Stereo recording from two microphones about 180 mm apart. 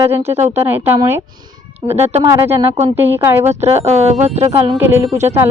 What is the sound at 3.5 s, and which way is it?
Speech, 35° right (ahead or behind).